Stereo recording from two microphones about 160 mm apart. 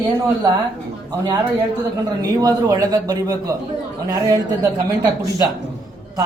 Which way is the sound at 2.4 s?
25° right (ahead or behind).